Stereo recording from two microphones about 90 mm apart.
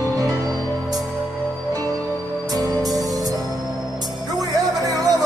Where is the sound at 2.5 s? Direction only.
45° right (ahead or behind).